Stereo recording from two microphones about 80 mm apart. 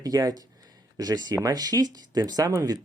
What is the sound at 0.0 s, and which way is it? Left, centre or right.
Speech, right.